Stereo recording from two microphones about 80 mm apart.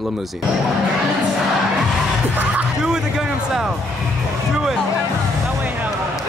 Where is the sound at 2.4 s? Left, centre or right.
Right.